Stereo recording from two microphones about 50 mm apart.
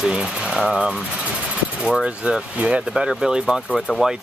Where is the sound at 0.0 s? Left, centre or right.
Centre.